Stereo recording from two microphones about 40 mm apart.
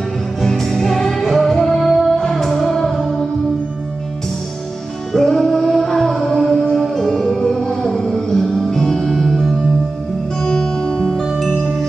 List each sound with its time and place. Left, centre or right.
0.4 s music: centre
5.1 s music: centre
10.5 s music: centre